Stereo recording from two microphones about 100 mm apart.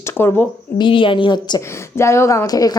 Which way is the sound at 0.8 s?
60° left (ahead or behind).